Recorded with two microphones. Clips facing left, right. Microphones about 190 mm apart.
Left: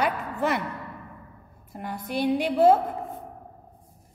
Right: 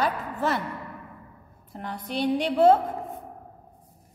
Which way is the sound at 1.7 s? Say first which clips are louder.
Left 1 dB; 10° left (ahead or behind).